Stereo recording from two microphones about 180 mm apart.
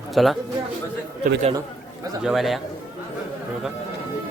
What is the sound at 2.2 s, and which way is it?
Speech, centre (ahead or behind).